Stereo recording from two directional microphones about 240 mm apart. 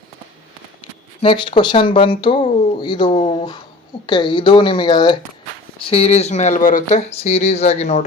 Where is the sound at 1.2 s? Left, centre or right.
Left.